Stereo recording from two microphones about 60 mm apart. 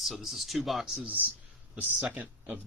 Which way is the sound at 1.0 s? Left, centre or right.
Right.